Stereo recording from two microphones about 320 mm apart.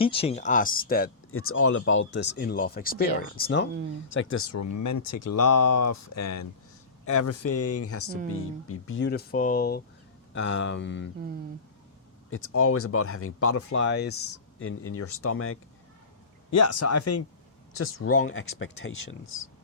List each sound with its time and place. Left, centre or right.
0.0 s speech: centre
1.3 s speech: left
7.0 s speech: left
12.3 s speech: left
16.6 s speech: left